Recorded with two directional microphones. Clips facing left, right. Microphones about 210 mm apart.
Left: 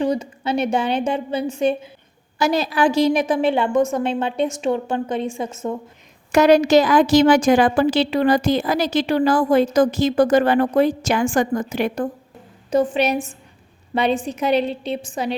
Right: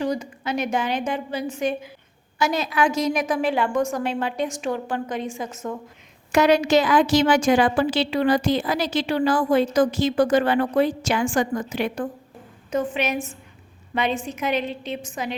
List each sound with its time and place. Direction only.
0.0 s a woman's voice: 25° left (ahead or behind)
6.3 s a woman's voice: 40° left (ahead or behind)
12.7 s a woman's voice: 35° left (ahead or behind)